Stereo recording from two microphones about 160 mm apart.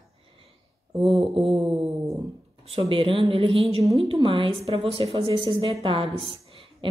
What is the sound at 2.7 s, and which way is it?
Speech, 35° right (ahead or behind).